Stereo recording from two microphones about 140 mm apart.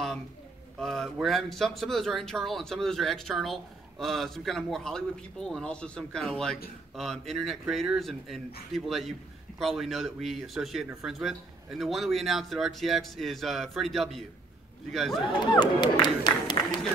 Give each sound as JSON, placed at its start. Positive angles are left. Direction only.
{"t": 0.7, "sound": "speech", "side_deg": 5}
{"t": 15.4, "sound": "speech", "side_deg": 30}